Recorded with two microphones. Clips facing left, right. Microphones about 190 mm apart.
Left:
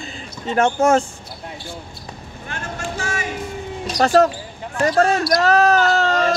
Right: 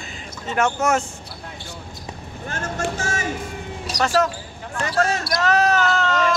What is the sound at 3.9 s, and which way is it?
Speech, 80° right.